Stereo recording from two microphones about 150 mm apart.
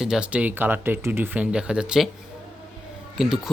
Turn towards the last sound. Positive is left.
turn(degrees=0)  # may be behind; listen again after turning